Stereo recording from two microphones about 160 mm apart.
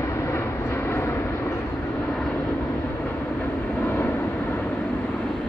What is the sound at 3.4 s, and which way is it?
Vehicle, 10° left (ahead or behind).